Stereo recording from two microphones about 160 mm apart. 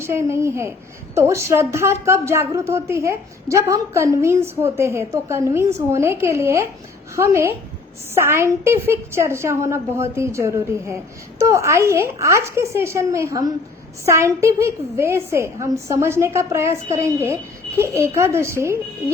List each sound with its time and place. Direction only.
0.0 s a woman's voice: 15° right (ahead or behind)